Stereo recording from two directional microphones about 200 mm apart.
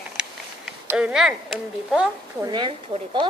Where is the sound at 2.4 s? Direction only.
20° right (ahead or behind).